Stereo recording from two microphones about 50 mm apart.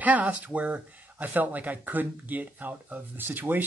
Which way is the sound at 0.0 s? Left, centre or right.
Right.